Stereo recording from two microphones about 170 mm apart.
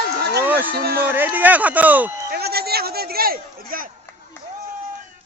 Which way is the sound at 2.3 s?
70° right (ahead or behind).